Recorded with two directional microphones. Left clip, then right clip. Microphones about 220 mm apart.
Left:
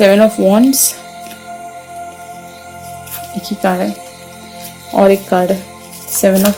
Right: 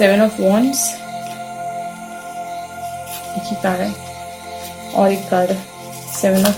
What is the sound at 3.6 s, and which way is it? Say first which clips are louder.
Speech: left 5 dB; 50° left (ahead or behind).